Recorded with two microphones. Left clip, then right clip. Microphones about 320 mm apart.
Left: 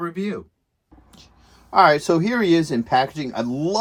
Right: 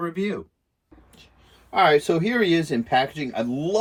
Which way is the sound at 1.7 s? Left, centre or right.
Left.